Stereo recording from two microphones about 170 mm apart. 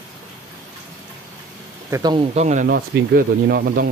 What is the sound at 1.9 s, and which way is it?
Speech, 25° right (ahead or behind).